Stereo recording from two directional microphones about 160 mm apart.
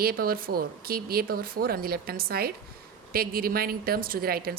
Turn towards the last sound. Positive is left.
turn(degrees=-70)  # may be behind; listen again after turning